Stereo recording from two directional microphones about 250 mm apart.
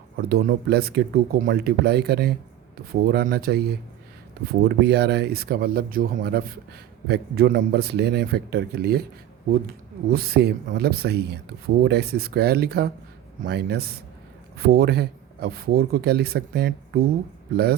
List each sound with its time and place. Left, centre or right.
0.2 s speech: right
4.6 s speech: right
10.1 s speech: right